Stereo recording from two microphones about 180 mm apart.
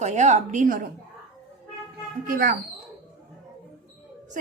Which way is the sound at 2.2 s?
55° right (ahead or behind).